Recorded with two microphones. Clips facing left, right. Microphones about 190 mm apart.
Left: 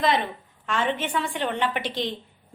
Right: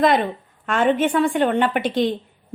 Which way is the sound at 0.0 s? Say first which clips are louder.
Right 6 dB; 50° right (ahead or behind).